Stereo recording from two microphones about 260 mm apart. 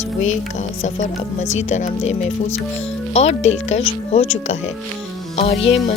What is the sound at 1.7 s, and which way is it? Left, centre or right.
Speech, left.